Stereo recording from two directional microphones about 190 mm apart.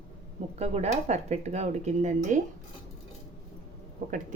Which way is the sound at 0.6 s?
35° right (ahead or behind).